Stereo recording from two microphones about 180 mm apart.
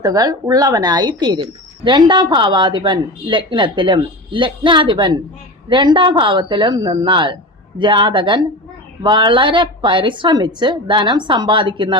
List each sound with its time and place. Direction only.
0.0 s speech: 20° right (ahead or behind)